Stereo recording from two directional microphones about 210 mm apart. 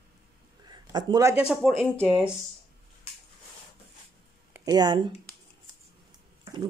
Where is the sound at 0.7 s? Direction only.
20° right (ahead or behind).